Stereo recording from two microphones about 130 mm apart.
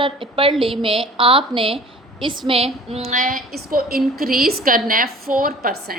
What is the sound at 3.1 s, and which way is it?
A woman's voice, 90° right.